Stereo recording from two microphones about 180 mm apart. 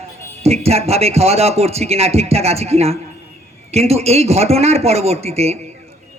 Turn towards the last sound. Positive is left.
turn(degrees=-35)  # may be behind; listen again after turning